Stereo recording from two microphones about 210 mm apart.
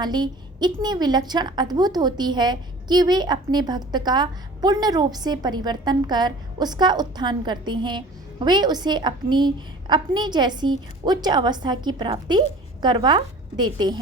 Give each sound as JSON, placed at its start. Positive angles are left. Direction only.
{"t": 0.0, "sound": "a woman's voice", "side_deg": -20}